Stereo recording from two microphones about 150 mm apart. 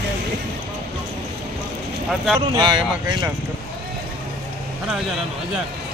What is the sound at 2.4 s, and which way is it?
Speech, 30° right (ahead or behind).